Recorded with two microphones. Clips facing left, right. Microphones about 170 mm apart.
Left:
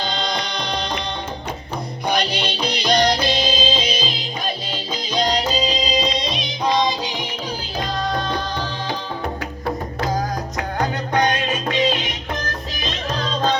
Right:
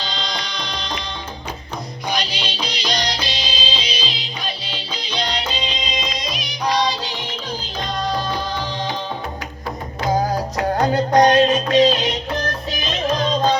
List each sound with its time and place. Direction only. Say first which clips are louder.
0.0 s music: left 4 dB; 55° left (ahead or behind); by 7.3 s 15° left (ahead or behind)
7.8 s music: even; centre (ahead or behind)
10.2 s music: right 4 dB; 30° right (ahead or behind)